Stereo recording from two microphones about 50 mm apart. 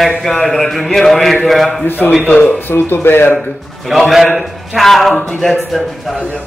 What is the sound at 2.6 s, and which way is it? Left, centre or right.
Speech, left.